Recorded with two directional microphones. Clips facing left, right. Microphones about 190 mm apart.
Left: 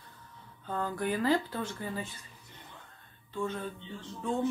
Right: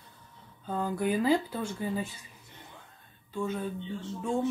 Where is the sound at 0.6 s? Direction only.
10° right (ahead or behind).